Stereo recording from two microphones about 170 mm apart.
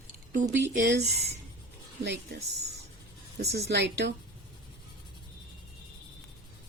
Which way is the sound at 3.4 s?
70° right (ahead or behind).